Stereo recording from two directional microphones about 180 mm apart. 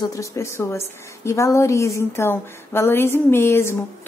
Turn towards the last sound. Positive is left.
turn(degrees=15)  # may be behind; listen again after turning